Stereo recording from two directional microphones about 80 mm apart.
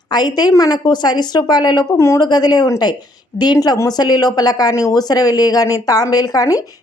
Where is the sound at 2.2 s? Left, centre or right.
Left.